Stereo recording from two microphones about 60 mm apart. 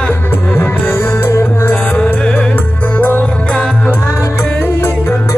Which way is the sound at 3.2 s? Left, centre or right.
Centre.